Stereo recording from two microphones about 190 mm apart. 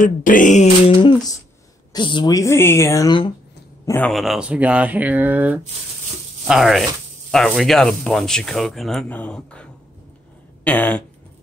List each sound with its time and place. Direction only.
0.0 s a sound: 45° left (ahead or behind); by 1.3 s 25° left (ahead or behind)
1.9 s speech: 25° left (ahead or behind)
4.1 s speech: centre (ahead or behind)